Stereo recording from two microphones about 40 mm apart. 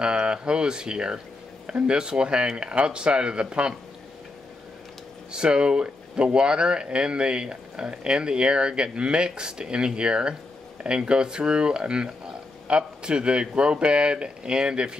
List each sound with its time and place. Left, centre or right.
0.0 s speech: right
5.3 s speech: right